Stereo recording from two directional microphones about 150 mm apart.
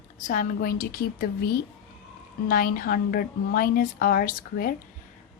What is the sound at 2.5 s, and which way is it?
A woman's voice, 75° left (ahead or behind).